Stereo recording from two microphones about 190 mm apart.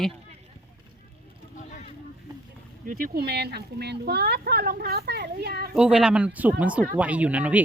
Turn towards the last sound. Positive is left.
turn(degrees=-5)  # may be behind; listen again after turning